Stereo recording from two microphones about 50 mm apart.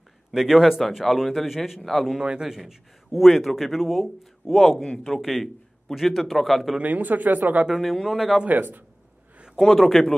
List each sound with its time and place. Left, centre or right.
0.3 s a man's voice: centre
2.1 s a man's voice: centre
6.8 s speech: right
7.7 s a man's voice: centre
8.5 s speech: right
9.6 s a man's voice: centre